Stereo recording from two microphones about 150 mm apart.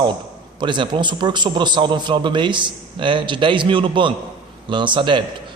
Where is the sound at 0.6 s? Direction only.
30° right (ahead or behind).